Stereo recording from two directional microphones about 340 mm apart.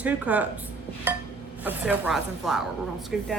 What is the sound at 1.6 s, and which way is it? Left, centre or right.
A woman's voice, centre.